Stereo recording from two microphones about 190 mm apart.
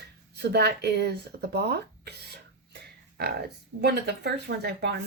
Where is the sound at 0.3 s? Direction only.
60° right (ahead or behind).